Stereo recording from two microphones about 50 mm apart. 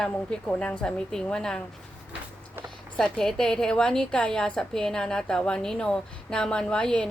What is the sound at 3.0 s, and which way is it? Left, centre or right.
A woman's voice, centre.